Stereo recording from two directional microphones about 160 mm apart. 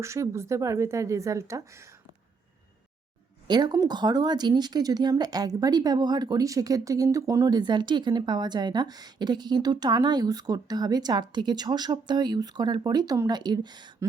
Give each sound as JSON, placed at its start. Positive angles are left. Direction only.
{"t": 0.0, "sound": "speech", "side_deg": -15}
{"t": 3.4, "sound": "speech", "side_deg": -25}